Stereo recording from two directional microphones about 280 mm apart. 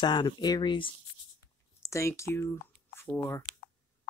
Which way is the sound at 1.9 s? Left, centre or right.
Centre.